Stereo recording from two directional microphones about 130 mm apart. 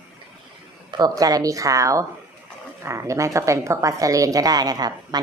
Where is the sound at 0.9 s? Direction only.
30° right (ahead or behind).